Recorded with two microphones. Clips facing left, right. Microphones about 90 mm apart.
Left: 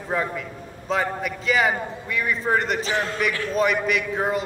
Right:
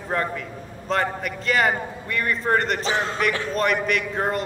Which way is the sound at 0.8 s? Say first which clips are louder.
Even; centre (ahead or behind).